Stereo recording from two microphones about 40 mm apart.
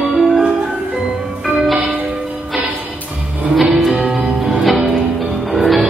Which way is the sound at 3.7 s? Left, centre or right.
Centre.